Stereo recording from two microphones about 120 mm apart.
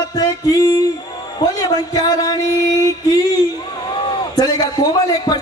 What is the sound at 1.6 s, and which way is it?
Speech, 30° left (ahead or behind).